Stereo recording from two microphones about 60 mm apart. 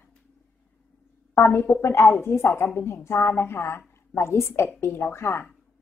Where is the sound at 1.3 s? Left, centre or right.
Left.